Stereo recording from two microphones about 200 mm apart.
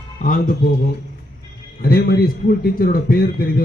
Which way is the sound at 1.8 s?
50° left (ahead or behind).